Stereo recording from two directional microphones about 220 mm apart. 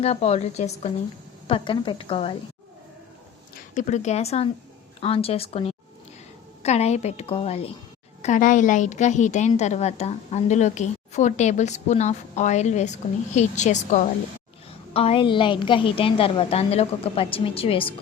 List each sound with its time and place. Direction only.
0.0 s a woman's voice: 30° left (ahead or behind)
3.8 s a woman's voice: 30° left (ahead or behind)